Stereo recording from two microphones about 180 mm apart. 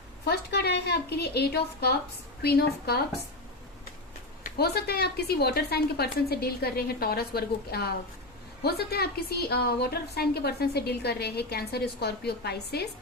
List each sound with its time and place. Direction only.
0.3 s a woman's voice: 65° left (ahead or behind)
4.4 s a woman's voice: 60° left (ahead or behind)